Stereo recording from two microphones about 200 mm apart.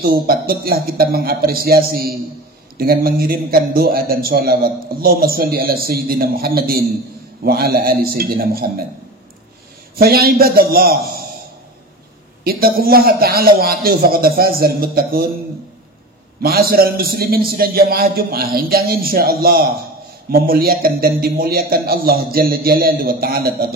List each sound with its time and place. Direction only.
0.0 s a man's voice: 50° right (ahead or behind)
9.9 s a man's voice: 50° right (ahead or behind)
12.4 s a man's voice: 45° right (ahead or behind)
16.4 s a man's voice: 50° right (ahead or behind)